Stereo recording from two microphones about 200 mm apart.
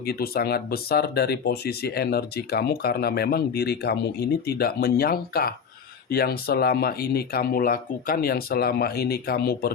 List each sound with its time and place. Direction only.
0.0 s speech: 50° left (ahead or behind)